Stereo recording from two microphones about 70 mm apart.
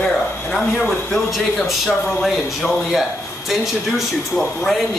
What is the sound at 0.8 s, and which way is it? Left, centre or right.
Speech, centre.